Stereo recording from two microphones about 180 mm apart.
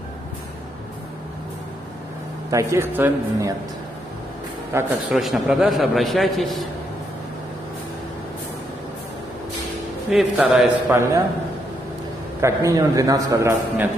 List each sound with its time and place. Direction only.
2.5 s a man's voice: 15° right (ahead or behind)
4.7 s a man's voice: 15° right (ahead or behind)
5.1 s a man's voice: centre (ahead or behind)
10.1 s a man's voice: 5° right (ahead or behind)
10.9 s a man's voice: 15° right (ahead or behind)
12.4 s a man's voice: 15° right (ahead or behind)